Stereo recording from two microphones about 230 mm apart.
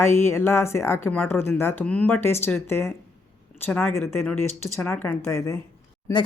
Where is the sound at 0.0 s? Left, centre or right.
Centre.